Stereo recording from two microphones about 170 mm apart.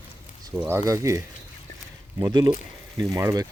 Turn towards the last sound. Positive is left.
turn(degrees=-20)  # may be behind; listen again after turning